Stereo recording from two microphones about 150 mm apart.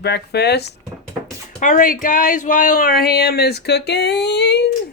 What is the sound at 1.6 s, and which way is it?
Speech, 65° left (ahead or behind).